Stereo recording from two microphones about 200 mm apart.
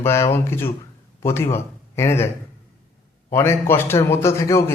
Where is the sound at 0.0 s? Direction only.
15° left (ahead or behind).